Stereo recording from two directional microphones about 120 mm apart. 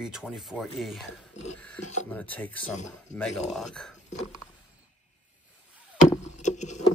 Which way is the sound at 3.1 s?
75° left (ahead or behind).